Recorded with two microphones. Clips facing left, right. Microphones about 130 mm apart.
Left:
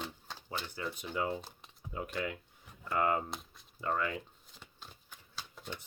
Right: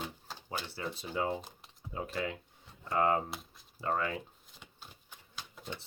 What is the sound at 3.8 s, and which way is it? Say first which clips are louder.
Speech: right 1 dB; 35° right (ahead or behind).